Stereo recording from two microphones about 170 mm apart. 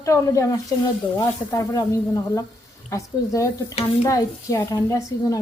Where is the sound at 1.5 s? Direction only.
20° left (ahead or behind).